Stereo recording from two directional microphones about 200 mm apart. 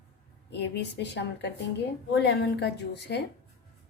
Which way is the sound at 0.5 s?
55° left (ahead or behind).